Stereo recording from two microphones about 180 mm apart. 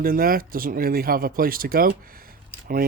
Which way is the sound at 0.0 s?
55° right (ahead or behind).